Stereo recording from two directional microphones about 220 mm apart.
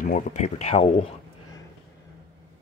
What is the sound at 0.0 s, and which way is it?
Speech, 35° left (ahead or behind).